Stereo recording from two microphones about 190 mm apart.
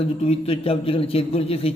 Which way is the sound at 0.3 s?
30° left (ahead or behind).